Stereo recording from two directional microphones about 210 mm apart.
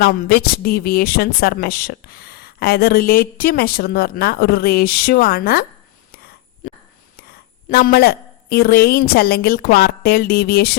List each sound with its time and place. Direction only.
0.0 s speech: 50° left (ahead or behind)
7.7 s speech: 45° left (ahead or behind)